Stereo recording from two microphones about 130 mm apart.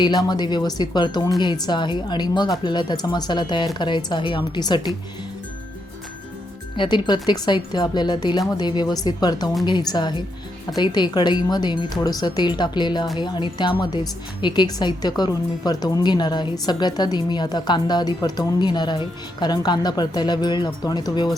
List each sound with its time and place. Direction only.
0.0 s a woman's voice: 30° left (ahead or behind)
6.7 s a woman's voice: 35° left (ahead or behind)